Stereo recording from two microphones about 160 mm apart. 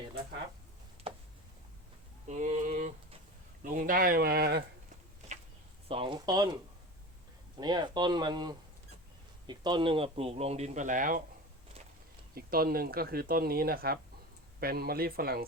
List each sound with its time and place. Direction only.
1.1 s a sound: 35° right (ahead or behind)
2.2 s a sound: 50° right (ahead or behind)
3.6 s speech: 55° right (ahead or behind); by 4.6 s 80° right
5.9 s speech: 30° right (ahead or behind)
7.6 s speech: 25° right (ahead or behind); by 11.2 s 55° right (ahead or behind)
12.3 s speech: 70° right (ahead or behind)